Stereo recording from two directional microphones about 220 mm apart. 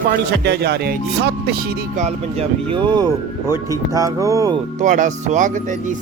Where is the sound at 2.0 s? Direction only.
30° right (ahead or behind).